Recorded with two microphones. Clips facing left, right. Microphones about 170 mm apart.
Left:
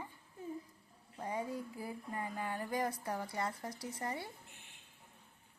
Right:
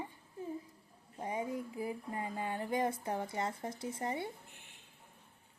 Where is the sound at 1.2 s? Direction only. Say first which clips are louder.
Right 2 dB; 20° right (ahead or behind).